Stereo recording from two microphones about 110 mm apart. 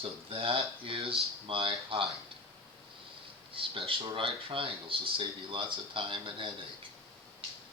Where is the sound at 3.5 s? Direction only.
55° right (ahead or behind).